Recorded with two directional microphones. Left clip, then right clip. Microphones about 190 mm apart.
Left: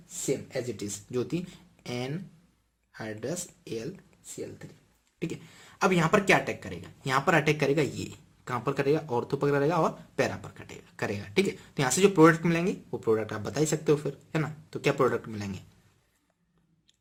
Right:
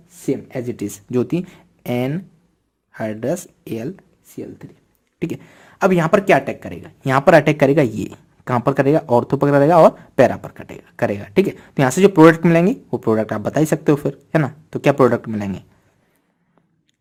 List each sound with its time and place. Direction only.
0.3 s speech: 55° right (ahead or behind)
5.2 s speech: 45° right (ahead or behind)
12.4 s speech: 50° right (ahead or behind)
14.9 s speech: 40° right (ahead or behind)